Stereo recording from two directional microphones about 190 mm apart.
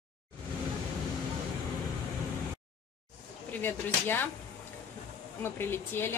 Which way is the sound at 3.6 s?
10° left (ahead or behind).